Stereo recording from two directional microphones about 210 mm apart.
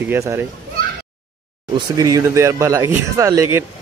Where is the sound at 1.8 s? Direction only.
15° right (ahead or behind).